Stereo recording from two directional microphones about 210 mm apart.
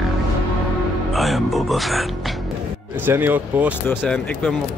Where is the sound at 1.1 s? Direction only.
Centre (ahead or behind).